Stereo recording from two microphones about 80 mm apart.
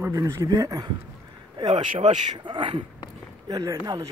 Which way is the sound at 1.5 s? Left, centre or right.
Right.